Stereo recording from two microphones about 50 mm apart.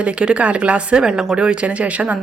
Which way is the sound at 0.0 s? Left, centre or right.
Right.